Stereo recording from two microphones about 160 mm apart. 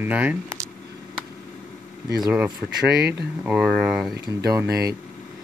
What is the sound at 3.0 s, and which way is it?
Speech, 90° right.